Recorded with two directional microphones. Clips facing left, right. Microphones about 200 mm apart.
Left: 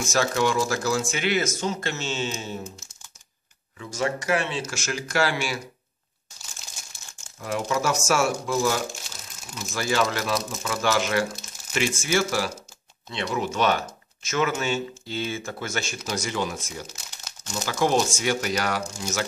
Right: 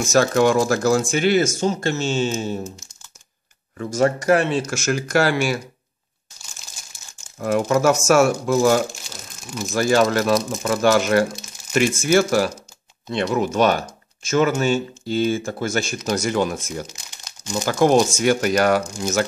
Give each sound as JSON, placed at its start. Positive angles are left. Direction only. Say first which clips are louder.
{"t": 0.1, "sound": "speech", "louder": "right 7 dB", "side_deg": -50}
{"t": 1.1, "sound": "speech", "louder": "right 7 dB", "side_deg": -35}
{"t": 1.6, "sound": "speech", "louder": "right 7 dB", "side_deg": -45}
{"t": 3.7, "sound": "speech", "louder": "right 8 dB", "side_deg": -50}
{"t": 7.3, "sound": "speech", "louder": "right 8 dB", "side_deg": -55}
{"t": 16.1, "sound": "speech", "louder": "right 8 dB", "side_deg": -50}
{"t": 16.8, "sound": "crumpling", "louder": "right 2 dB", "side_deg": 5}
{"t": 17.6, "sound": "speech", "louder": "right 7 dB", "side_deg": -50}